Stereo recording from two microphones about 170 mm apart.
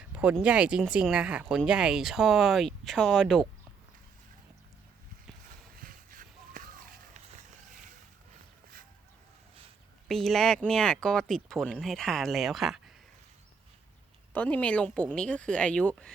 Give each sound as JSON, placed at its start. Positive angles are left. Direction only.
{"t": 0.1, "sound": "speech", "side_deg": -10}
{"t": 5.7, "sound": "vehicle", "side_deg": -55}
{"t": 10.1, "sound": "speech", "side_deg": 0}
{"t": 14.3, "sound": "a woman's voice", "side_deg": 10}